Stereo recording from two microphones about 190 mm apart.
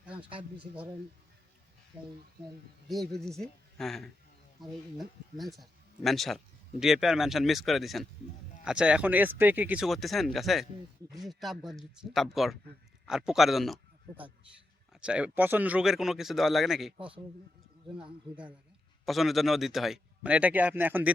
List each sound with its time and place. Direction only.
0.2 s speech: 25° right (ahead or behind)
2.9 s speech: centre (ahead or behind)
15.0 s speech: 5° right (ahead or behind)
19.0 s speech: centre (ahead or behind)